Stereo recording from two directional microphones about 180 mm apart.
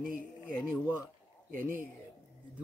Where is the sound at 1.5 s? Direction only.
50° right (ahead or behind).